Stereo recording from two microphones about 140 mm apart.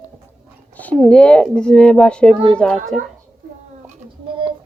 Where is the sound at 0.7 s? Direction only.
10° left (ahead or behind).